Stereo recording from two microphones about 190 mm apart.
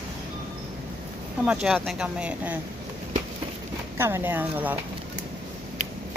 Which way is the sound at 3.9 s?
10° right (ahead or behind).